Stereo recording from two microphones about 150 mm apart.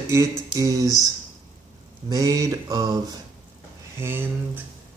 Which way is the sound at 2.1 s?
20° right (ahead or behind).